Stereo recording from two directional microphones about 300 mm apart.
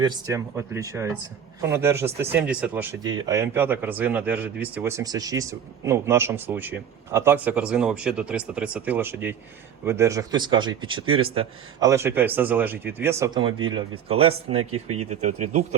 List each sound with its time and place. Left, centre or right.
0.0 s speech: centre
14.6 s speech: right
15.1 s speech: right